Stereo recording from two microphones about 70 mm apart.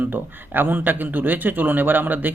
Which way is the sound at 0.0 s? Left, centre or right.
Right.